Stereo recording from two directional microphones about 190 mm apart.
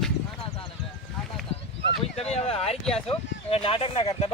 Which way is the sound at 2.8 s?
5° left (ahead or behind).